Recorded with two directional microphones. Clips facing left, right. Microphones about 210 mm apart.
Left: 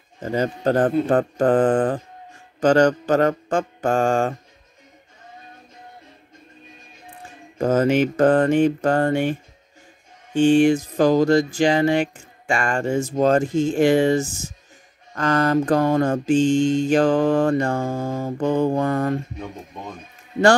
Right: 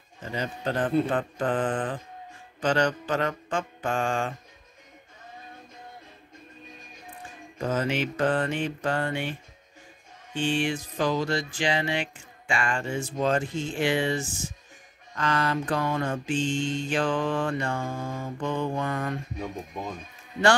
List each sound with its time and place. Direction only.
0.2 s speech: 45° left (ahead or behind)
7.5 s speech: 45° left (ahead or behind)